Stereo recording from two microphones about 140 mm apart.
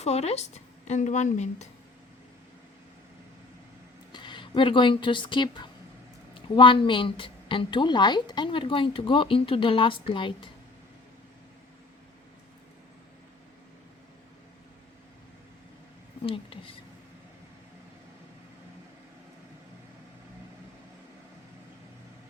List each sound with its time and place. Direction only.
0.0 s a woman's voice: 50° left (ahead or behind)
4.1 s a woman's voice: 35° left (ahead or behind)
16.2 s a sound: 40° left (ahead or behind)